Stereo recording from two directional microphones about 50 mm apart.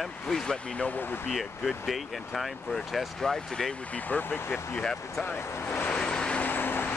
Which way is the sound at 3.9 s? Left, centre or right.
Left.